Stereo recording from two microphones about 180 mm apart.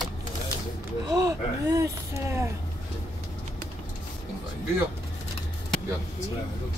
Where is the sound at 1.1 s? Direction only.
20° right (ahead or behind).